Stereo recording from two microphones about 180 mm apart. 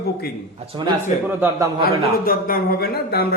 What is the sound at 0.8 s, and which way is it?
Speech, 25° right (ahead or behind).